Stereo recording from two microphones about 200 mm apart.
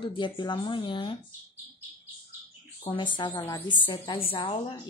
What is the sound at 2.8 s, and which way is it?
A woman's voice, 25° left (ahead or behind).